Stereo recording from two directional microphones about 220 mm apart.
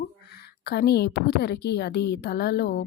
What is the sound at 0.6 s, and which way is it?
A woman's voice, 45° left (ahead or behind).